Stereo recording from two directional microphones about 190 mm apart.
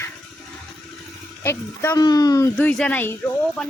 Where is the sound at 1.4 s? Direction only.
15° left (ahead or behind).